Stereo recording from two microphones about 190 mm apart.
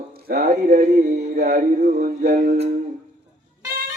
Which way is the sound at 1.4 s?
45° right (ahead or behind).